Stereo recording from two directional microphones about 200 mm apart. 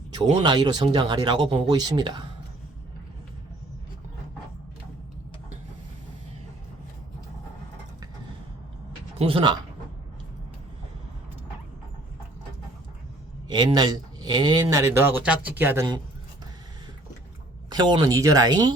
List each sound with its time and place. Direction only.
0.4 s speech: 20° right (ahead or behind)
9.1 s speech: 25° right (ahead or behind)
13.5 s speech: 20° right (ahead or behind)
17.7 s speech: 20° right (ahead or behind)